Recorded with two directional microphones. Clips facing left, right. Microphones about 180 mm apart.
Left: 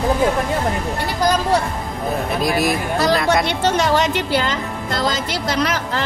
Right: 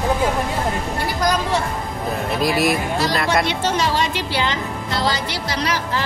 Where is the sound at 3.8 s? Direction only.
50° left (ahead or behind).